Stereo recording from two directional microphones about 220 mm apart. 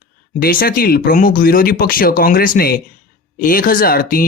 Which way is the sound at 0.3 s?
45° left (ahead or behind).